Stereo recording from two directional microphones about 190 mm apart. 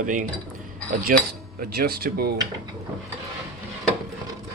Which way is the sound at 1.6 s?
50° right (ahead or behind).